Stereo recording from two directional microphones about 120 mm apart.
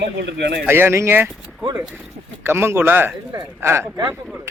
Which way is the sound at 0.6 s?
20° right (ahead or behind).